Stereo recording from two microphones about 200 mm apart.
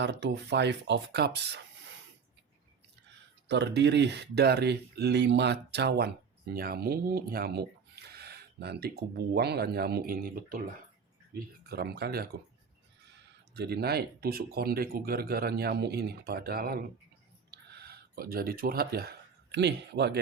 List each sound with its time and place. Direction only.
0.0 s speech: 60° right (ahead or behind)
3.5 s speech: 60° right (ahead or behind)
13.6 s speech: 55° right (ahead or behind)
17.5 s a sound: 55° right (ahead or behind)